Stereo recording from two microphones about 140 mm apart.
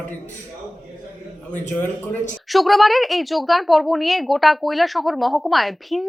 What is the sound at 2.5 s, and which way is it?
Speech, centre (ahead or behind).